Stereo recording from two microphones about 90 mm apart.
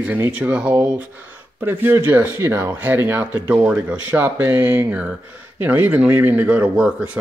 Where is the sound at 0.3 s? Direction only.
15° right (ahead or behind).